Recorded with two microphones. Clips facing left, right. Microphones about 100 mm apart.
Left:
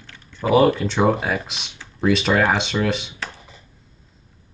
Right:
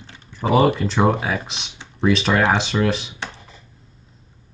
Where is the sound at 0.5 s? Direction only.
Centre (ahead or behind).